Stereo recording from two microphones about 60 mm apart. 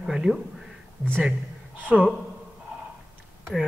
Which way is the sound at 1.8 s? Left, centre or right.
Right.